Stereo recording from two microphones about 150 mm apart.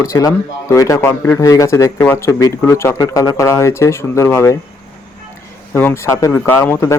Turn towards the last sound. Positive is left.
turn(degrees=20)  # may be behind; listen again after turning